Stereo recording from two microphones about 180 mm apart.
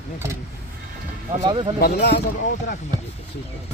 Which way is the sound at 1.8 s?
65° left (ahead or behind).